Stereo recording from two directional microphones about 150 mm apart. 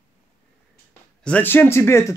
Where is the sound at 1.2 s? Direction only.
10° left (ahead or behind).